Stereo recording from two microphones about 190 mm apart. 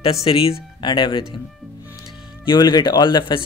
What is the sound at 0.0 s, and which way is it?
Speech, 30° left (ahead or behind).